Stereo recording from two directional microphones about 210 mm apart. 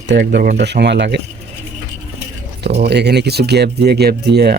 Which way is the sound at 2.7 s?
50° right (ahead or behind).